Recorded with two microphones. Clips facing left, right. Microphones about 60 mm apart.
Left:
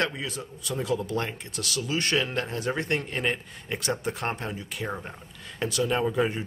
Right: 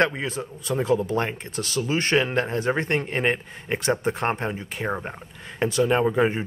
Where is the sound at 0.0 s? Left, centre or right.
Right.